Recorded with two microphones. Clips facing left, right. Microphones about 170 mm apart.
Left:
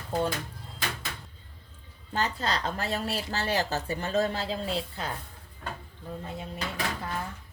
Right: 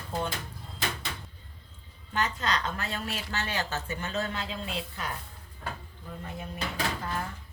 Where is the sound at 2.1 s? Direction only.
35° left (ahead or behind).